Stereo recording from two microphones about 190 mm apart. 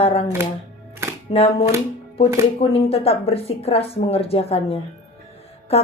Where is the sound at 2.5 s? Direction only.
30° left (ahead or behind).